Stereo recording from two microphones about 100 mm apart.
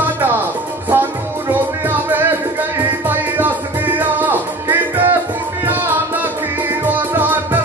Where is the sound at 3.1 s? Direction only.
20° right (ahead or behind).